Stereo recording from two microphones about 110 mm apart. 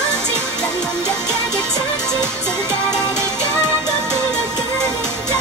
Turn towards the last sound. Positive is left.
turn(degrees=-20)  # may be behind; listen again after turning